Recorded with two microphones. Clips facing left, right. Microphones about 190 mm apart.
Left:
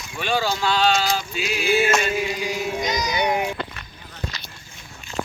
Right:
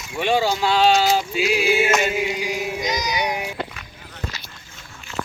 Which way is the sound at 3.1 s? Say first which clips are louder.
Left 3 dB; 55° left (ahead or behind).